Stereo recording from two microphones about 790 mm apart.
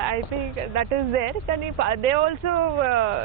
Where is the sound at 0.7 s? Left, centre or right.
Right.